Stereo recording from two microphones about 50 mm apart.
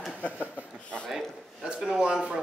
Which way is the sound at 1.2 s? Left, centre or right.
Centre.